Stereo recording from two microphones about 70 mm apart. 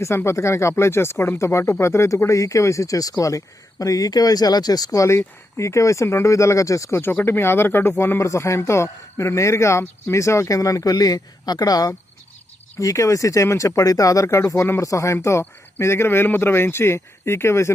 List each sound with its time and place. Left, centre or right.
0.3 s speech: left
7.0 s speech: left